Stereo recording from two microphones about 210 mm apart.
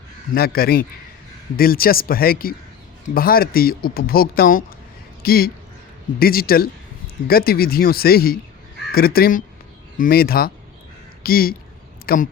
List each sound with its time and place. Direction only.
0.3 s speech: 45° left (ahead or behind)